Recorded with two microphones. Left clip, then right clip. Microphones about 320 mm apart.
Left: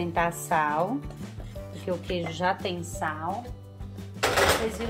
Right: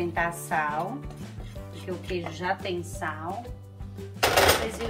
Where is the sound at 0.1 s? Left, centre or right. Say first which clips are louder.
Left 2 dB; left.